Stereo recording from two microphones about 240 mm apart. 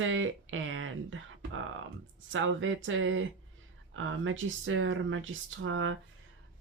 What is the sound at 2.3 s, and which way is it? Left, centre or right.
Speech, right.